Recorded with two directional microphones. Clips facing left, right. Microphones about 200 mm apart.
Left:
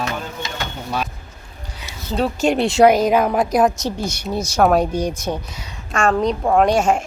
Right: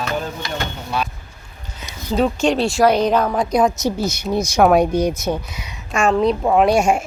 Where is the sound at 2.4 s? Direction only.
15° left (ahead or behind).